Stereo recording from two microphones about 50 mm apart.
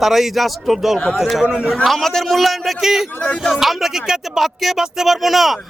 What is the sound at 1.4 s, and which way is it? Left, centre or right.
Speech, right.